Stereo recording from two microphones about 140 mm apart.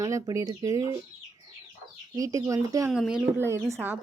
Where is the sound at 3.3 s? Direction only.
20° right (ahead or behind).